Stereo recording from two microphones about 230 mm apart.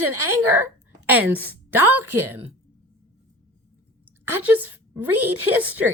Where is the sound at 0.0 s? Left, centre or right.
Right.